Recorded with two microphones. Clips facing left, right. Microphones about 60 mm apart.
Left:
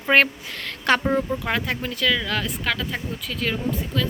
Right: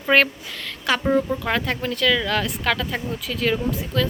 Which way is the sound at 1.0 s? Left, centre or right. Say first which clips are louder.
Right 2 dB; centre.